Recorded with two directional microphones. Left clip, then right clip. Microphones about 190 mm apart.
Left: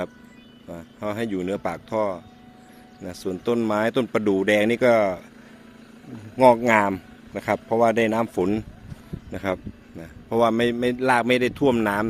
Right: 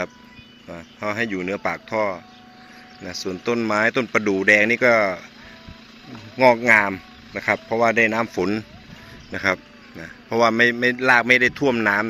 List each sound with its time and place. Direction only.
0.9 s a man's voice: 10° left (ahead or behind)
6.3 s a man's voice: 20° left (ahead or behind)